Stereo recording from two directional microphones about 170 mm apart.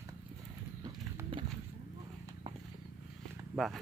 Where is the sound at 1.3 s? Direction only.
30° right (ahead or behind).